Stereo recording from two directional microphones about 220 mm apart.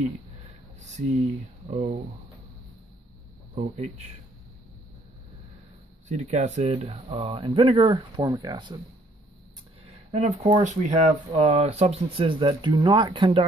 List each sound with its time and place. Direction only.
0.7 s a sound: 30° right (ahead or behind)
1.7 s speech: 25° right (ahead or behind)
3.5 s speech: 30° right (ahead or behind)
6.0 s speech: 30° right (ahead or behind)
10.1 s speech: 25° right (ahead or behind)